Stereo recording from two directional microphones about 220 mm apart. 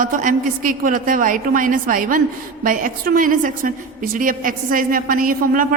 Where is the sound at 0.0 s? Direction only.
35° right (ahead or behind).